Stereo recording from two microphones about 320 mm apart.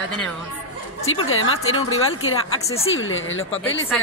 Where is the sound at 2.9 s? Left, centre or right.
Left.